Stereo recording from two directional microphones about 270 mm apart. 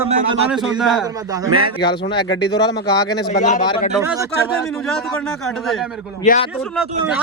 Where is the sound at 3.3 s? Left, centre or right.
Left.